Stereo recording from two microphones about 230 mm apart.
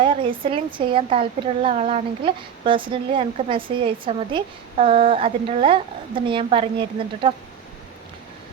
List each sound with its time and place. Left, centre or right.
0.0 s speech: right